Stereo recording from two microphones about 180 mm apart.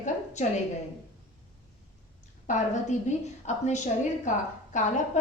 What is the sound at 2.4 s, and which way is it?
A woman's voice, 40° left (ahead or behind).